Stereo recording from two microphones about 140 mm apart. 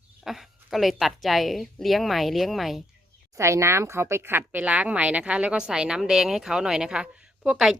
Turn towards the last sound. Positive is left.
turn(degrees=-5)  # may be behind; listen again after turning